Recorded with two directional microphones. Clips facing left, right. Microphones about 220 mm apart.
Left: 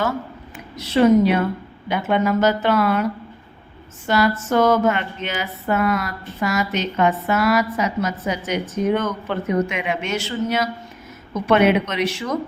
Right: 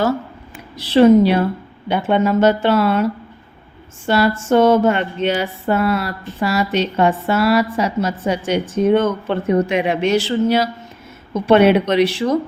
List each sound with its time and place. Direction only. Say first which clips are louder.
0.8 s speech: right 4 dB; 30° right (ahead or behind)